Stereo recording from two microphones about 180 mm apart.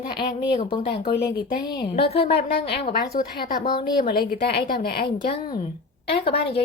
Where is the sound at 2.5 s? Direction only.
65° left (ahead or behind).